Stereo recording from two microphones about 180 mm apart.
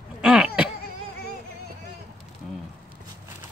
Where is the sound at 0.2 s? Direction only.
5° right (ahead or behind).